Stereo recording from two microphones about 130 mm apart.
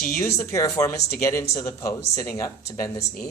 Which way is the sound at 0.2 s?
20° left (ahead or behind).